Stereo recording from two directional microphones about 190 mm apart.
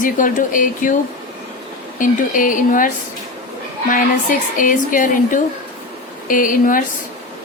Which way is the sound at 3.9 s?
45° left (ahead or behind).